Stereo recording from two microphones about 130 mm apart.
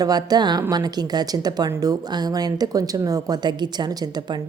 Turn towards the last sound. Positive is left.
turn(degrees=-30)  # may be behind; listen again after turning